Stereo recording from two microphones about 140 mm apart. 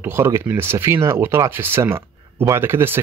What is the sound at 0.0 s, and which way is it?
Speech, 15° right (ahead or behind).